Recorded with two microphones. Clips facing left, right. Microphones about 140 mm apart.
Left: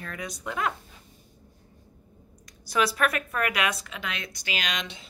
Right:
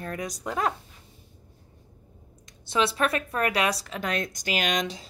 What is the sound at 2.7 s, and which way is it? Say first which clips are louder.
A woman's voice: right 1 dB; 25° right (ahead or behind).